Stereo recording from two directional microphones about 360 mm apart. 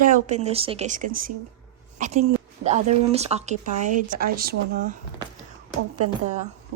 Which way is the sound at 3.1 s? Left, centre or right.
Centre.